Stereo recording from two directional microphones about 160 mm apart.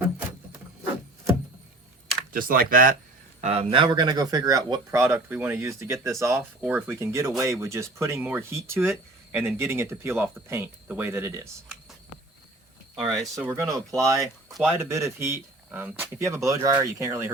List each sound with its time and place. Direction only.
2.3 s speech: 60° right (ahead or behind)
3.4 s speech: 40° right (ahead or behind); by 11.4 s 15° right (ahead or behind)
13.3 s speech: 15° right (ahead or behind)